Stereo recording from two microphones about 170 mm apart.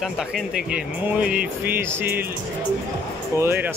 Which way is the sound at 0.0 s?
5° right (ahead or behind).